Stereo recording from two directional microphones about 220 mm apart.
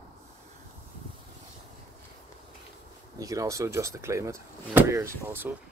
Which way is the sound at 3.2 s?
15° right (ahead or behind).